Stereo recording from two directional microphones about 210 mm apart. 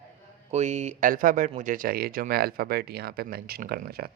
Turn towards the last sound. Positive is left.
turn(degrees=-45)  # may be behind; listen again after turning